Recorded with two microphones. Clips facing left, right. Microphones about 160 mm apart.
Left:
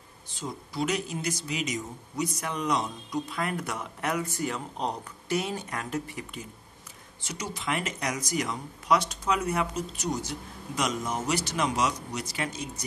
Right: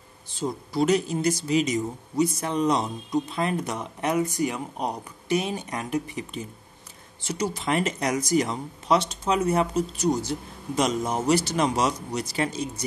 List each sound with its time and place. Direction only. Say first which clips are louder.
0.4 s speech: right 7 dB; 35° right (ahead or behind)
7.2 s speech: right 8 dB; 30° right (ahead or behind)